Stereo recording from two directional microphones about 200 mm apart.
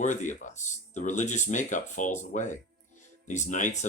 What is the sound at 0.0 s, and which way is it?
Speech, 40° left (ahead or behind).